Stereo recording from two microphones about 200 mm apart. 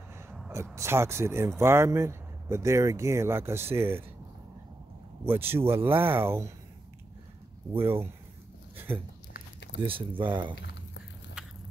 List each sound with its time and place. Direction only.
0.7 s speech: 15° right (ahead or behind)
5.2 s speech: 10° right (ahead or behind)
7.7 s speech: 10° right (ahead or behind)
9.3 s a sound: 60° left (ahead or behind)
9.8 s speech: 25° right (ahead or behind)
11.4 s walk: 5° right (ahead or behind)